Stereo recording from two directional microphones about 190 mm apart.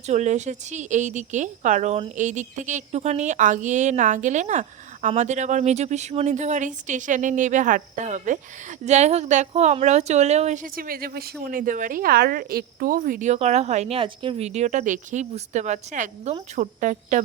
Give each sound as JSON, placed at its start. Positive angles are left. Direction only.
{"t": 0.1, "sound": "speech", "side_deg": -40}